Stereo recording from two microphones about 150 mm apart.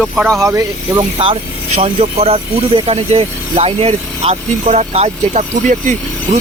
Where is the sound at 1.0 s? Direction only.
40° right (ahead or behind).